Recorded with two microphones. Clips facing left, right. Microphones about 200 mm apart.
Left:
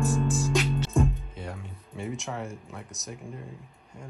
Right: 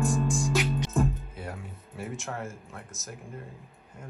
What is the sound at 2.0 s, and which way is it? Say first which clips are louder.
Music: left 2 dB; centre (ahead or behind).